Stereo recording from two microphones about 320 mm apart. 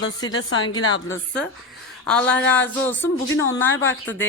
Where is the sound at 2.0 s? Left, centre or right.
Centre.